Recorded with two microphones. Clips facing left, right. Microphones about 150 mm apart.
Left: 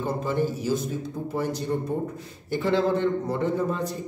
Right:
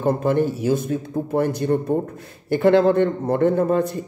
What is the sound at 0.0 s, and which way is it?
A man's voice, 60° right (ahead or behind).